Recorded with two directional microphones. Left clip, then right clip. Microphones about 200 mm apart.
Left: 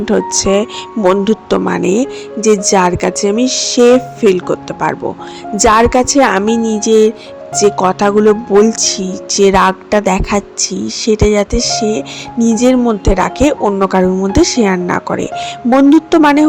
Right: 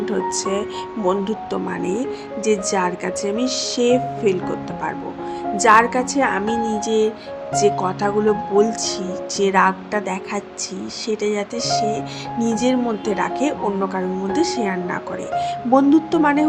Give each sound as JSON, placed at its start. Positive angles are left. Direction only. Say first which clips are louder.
{"t": 0.0, "sound": "speech", "louder": "left 8 dB", "side_deg": 45}